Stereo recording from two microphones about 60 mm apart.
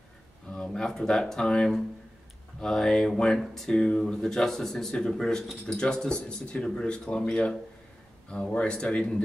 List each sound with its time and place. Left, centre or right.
0.5 s speech: centre